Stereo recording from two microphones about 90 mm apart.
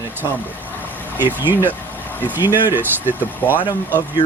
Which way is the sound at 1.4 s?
25° right (ahead or behind).